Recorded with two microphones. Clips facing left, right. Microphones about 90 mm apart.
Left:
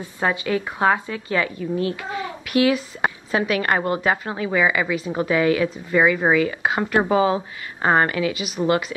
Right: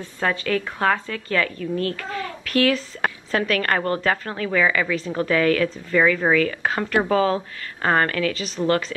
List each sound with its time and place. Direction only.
0.0 s a woman's voice: 15° left (ahead or behind)